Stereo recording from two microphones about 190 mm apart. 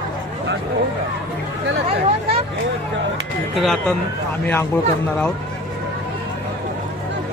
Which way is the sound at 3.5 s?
Centre (ahead or behind).